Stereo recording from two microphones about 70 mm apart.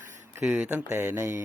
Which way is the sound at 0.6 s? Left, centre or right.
Right.